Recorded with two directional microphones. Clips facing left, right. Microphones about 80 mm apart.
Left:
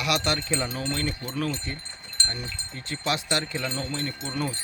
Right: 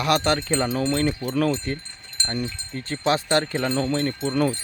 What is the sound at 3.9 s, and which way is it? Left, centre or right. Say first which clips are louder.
Speech: right 8 dB; right.